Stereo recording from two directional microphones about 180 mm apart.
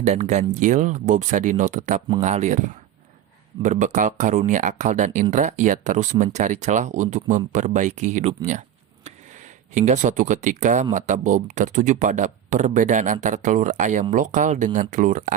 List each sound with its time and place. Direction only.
0.0 s speech: 40° right (ahead or behind)
9.7 s speech: 40° right (ahead or behind)